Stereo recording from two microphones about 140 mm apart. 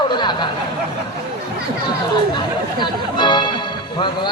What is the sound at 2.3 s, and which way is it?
Music, 35° left (ahead or behind).